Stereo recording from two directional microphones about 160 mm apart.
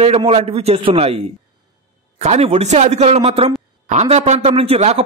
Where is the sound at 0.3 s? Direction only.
40° right (ahead or behind).